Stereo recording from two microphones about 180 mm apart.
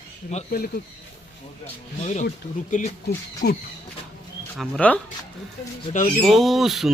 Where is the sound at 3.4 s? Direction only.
65° left (ahead or behind).